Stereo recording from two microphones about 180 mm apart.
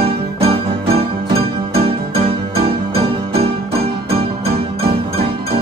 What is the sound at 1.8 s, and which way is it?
Music, 35° right (ahead or behind).